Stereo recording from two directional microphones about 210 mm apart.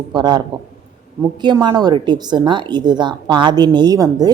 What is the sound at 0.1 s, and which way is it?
A woman's voice, 20° right (ahead or behind).